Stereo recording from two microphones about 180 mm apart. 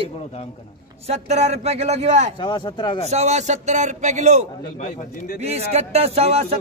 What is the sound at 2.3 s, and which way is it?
Speech, 25° left (ahead or behind).